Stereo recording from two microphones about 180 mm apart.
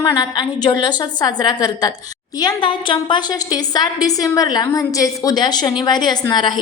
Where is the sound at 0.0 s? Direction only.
20° left (ahead or behind).